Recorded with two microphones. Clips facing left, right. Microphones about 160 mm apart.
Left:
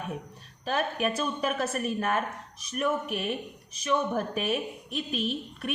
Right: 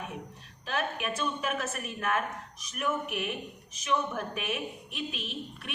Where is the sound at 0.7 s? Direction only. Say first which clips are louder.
Left 5 dB; 40° left (ahead or behind).